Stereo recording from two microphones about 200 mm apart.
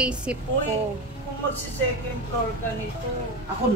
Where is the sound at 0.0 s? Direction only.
5° right (ahead or behind).